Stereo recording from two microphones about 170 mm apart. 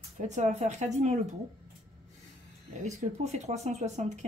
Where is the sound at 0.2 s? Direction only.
45° right (ahead or behind).